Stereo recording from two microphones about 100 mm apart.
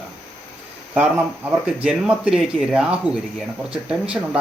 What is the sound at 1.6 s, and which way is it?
Speech, 10° right (ahead or behind).